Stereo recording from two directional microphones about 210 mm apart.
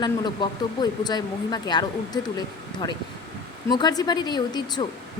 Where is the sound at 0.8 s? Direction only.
20° left (ahead or behind).